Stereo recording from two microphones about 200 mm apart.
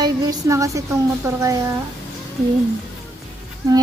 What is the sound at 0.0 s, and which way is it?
A woman's voice, 15° right (ahead or behind).